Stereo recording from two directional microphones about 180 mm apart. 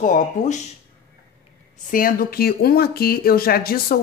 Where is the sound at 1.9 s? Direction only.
50° left (ahead or behind).